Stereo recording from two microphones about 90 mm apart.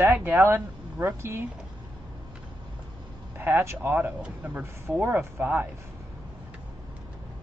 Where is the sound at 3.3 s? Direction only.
25° right (ahead or behind).